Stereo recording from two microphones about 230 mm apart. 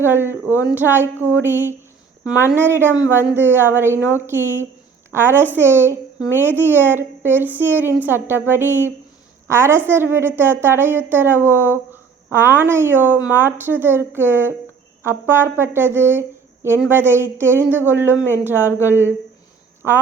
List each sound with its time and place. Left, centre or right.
0.0 s a woman's voice: centre